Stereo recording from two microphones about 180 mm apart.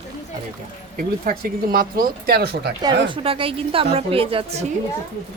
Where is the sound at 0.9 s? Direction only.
50° right (ahead or behind).